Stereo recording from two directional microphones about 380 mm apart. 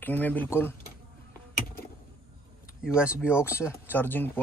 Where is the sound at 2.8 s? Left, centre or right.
Centre.